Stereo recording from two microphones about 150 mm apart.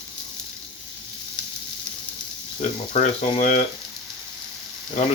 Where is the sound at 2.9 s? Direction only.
50° left (ahead or behind).